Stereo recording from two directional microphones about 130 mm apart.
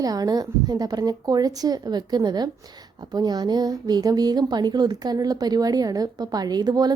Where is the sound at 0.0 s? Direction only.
30° right (ahead or behind).